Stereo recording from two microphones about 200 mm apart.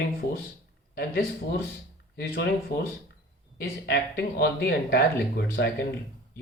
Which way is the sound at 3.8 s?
50° left (ahead or behind).